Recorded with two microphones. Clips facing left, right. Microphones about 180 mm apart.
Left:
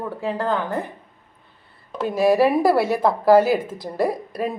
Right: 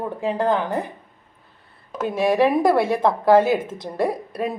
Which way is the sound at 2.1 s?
5° left (ahead or behind).